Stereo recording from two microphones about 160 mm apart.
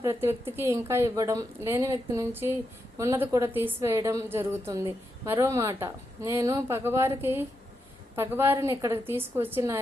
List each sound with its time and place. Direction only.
0.0 s a woman's voice: 15° right (ahead or behind)